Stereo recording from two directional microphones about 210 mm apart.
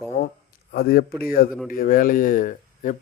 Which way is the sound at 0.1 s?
35° left (ahead or behind).